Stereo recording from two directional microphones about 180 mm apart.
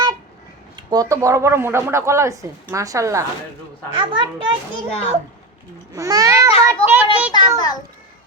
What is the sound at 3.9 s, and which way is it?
Speech, 25° right (ahead or behind).